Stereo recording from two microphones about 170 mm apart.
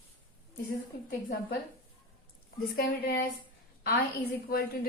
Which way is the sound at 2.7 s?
65° left (ahead or behind).